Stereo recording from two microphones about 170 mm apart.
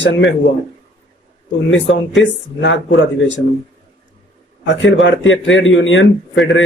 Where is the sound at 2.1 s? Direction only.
90° left.